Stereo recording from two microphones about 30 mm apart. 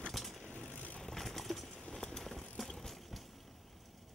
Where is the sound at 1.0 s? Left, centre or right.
Centre.